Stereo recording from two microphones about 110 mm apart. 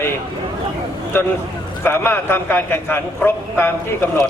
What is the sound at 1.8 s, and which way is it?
A man's voice, 20° left (ahead or behind).